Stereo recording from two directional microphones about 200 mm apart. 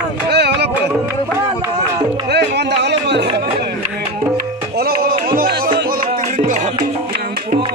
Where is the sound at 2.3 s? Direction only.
55° right (ahead or behind).